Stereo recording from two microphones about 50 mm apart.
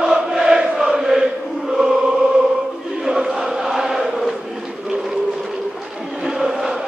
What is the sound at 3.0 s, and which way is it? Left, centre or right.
Chant, centre.